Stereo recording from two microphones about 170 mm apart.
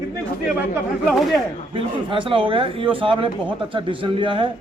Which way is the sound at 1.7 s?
30° right (ahead or behind).